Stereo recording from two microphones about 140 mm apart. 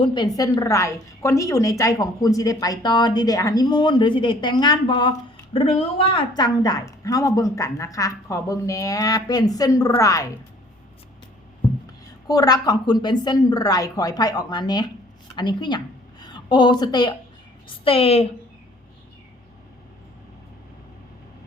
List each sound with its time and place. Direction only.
0.0 s a woman's voice: 35° left (ahead or behind)
5.5 s speech: 45° left (ahead or behind)
6.3 s a woman's voice: 30° left (ahead or behind)
12.3 s a woman's voice: 30° left (ahead or behind)
17.7 s a woman's voice: 40° left (ahead or behind)